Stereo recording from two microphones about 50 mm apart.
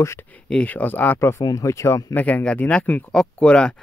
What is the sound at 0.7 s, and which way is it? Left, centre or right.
Speech, left.